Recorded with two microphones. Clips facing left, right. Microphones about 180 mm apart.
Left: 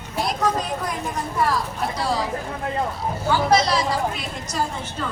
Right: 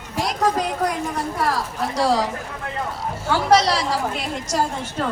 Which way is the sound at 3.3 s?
80° right.